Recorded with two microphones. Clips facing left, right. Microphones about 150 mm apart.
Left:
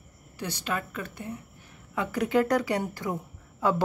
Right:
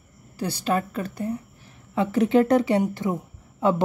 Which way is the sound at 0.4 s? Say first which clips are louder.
Right 7 dB; 35° right (ahead or behind).